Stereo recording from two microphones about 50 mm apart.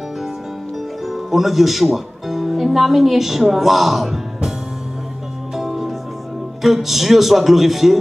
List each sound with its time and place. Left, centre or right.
1.0 s speech: centre
5.6 s music: centre
6.6 s a man's voice: centre